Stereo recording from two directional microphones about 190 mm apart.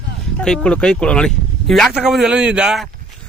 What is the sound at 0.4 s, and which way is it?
Speech, 5° left (ahead or behind).